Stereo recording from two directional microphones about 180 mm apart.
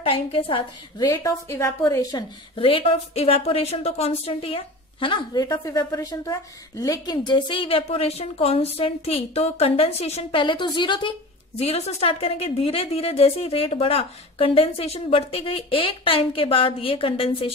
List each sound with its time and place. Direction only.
0.0 s a woman's voice: 30° left (ahead or behind)